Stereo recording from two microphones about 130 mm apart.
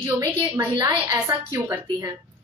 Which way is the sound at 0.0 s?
20° right (ahead or behind).